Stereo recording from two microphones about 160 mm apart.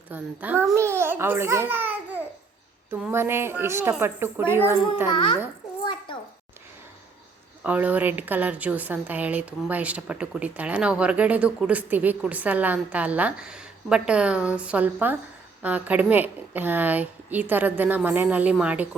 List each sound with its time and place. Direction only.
0.1 s a woman's voice: 10° right (ahead or behind)
0.8 s babbling: 15° right (ahead or behind)
2.9 s a woman's voice: 15° right (ahead or behind)
5.1 s a child's voice: 30° left (ahead or behind)
5.8 s a sound: 30° left (ahead or behind)
7.6 s a woman's voice: 10° right (ahead or behind)